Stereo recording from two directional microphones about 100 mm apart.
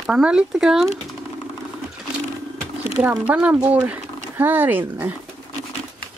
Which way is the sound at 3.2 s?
10° right (ahead or behind).